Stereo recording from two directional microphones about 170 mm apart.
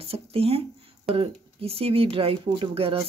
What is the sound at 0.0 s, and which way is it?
Speech, 35° right (ahead or behind).